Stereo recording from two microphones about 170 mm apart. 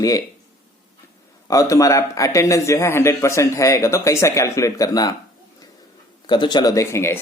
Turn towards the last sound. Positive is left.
turn(degrees=15)  # may be behind; listen again after turning